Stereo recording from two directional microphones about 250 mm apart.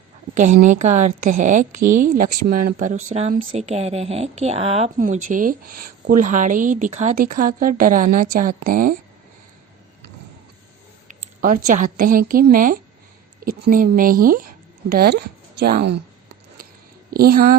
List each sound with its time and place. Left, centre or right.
0.3 s a woman's voice: right
11.1 s a woman's voice: right
17.1 s speech: right